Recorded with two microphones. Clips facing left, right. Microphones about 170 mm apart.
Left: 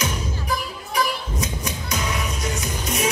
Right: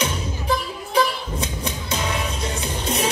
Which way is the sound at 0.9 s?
30° right (ahead or behind).